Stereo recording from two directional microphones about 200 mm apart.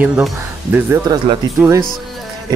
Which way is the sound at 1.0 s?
20° right (ahead or behind).